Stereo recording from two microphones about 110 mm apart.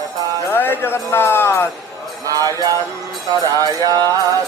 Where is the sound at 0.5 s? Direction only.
20° left (ahead or behind).